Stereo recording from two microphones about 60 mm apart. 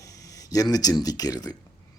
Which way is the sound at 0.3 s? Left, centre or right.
Left.